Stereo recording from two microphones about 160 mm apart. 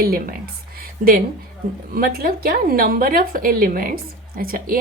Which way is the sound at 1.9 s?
70° right (ahead or behind).